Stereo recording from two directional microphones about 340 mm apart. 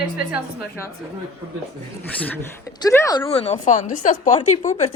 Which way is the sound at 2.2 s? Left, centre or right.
Centre.